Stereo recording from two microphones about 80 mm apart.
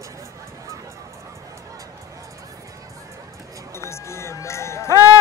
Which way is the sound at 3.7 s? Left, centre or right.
Left.